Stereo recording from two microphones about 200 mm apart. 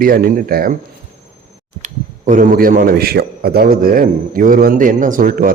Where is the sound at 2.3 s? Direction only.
40° right (ahead or behind).